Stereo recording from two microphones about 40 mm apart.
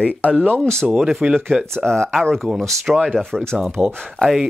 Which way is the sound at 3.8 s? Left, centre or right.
Right.